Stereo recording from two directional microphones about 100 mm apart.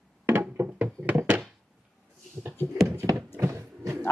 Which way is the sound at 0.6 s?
20° right (ahead or behind).